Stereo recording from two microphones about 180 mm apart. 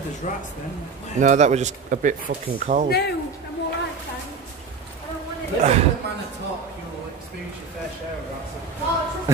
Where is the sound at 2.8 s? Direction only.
65° left (ahead or behind).